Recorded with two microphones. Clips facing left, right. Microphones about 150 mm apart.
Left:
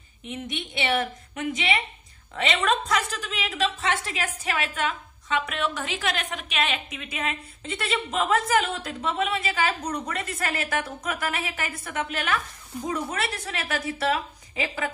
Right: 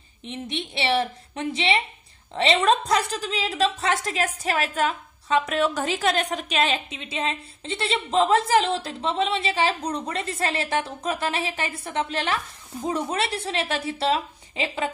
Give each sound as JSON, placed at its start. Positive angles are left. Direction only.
{"t": 0.2, "sound": "a woman's voice", "side_deg": -30}